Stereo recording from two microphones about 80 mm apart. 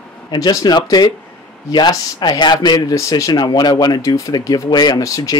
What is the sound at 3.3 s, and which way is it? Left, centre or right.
Speech, left.